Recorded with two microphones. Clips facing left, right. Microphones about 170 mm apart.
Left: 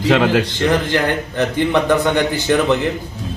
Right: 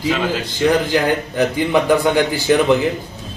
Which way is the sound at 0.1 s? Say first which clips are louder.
Left 7 dB; 70° left (ahead or behind).